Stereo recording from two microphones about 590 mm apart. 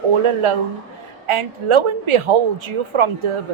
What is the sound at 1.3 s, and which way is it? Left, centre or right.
A woman's voice, right.